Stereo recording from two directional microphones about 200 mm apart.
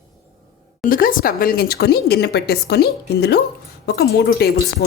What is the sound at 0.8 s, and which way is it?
Speech, 45° left (ahead or behind).